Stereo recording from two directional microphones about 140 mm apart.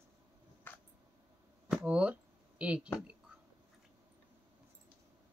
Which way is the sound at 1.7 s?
10° right (ahead or behind).